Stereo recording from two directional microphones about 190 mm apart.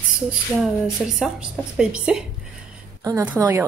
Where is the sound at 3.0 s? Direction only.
20° right (ahead or behind).